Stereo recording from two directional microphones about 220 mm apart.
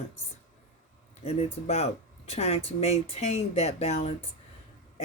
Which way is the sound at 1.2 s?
30° left (ahead or behind).